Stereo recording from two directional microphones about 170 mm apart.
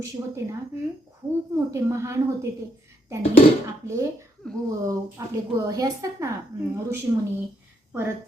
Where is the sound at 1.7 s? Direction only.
15° right (ahead or behind).